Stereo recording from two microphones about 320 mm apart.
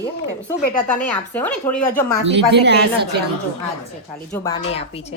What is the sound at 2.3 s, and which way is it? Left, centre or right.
Speech, right.